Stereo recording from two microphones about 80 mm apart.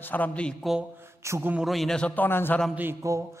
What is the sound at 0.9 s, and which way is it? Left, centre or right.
Mantra, right.